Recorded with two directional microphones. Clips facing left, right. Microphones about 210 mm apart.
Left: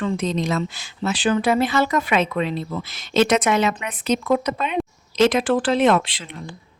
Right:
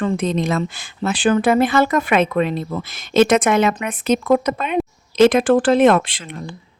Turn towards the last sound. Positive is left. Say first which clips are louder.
# right 2 dB
turn(degrees=-50)  # may be behind; listen again after turning